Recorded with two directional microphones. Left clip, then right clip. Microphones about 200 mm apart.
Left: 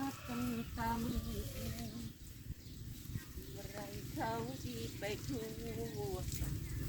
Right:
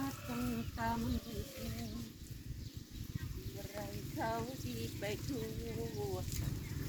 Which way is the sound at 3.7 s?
Centre (ahead or behind).